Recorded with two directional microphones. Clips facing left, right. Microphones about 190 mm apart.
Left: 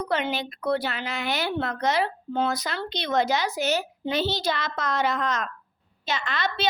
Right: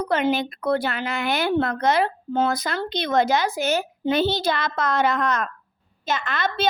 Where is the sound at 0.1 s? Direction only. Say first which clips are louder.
Right 7 dB; 45° right (ahead or behind).